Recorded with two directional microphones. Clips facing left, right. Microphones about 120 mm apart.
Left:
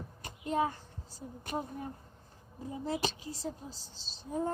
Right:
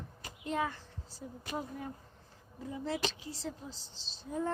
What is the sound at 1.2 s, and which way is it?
Speech, 30° left (ahead or behind).